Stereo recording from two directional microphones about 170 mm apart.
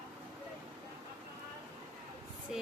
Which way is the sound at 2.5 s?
Centre (ahead or behind).